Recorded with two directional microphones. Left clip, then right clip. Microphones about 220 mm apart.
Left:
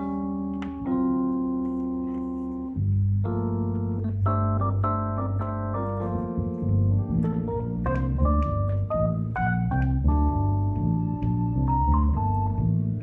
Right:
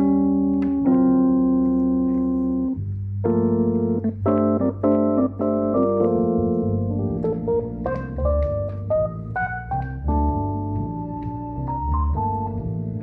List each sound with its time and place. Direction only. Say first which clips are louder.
0.0 s music: right 11 dB; 30° right (ahead or behind)
3.3 s organ: right 11 dB; 40° right (ahead or behind)